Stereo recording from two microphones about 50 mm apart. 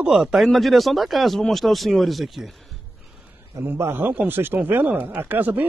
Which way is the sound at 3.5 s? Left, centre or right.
Right.